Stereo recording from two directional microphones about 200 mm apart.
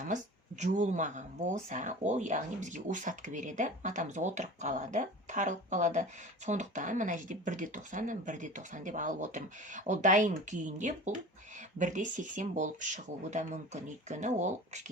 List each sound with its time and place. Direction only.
0.6 s speech: 40° right (ahead or behind)